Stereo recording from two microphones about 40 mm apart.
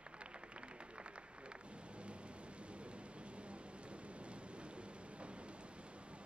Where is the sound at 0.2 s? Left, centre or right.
Right.